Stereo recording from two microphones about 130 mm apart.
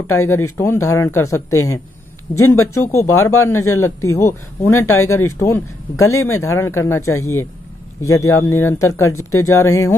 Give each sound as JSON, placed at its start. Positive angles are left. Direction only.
{"t": 0.0, "sound": "speech", "side_deg": 20}